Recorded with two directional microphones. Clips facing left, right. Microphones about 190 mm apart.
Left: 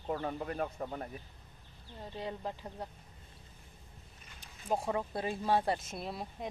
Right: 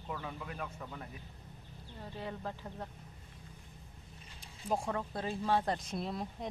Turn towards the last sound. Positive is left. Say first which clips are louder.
# right 2 dB
turn(degrees=5)  # may be behind; listen again after turning